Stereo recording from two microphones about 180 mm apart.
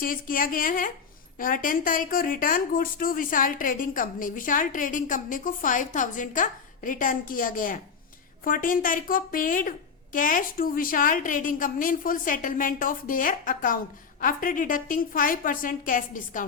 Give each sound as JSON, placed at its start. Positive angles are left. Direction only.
{"t": 0.0, "sound": "a woman's voice", "side_deg": 50}